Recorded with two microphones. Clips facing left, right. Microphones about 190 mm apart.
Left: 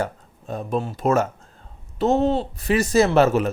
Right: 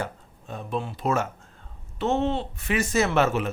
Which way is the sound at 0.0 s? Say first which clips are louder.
Left 6 dB; 40° left (ahead or behind).